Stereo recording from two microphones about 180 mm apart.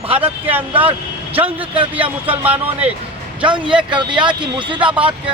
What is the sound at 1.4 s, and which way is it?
Speech, 10° right (ahead or behind).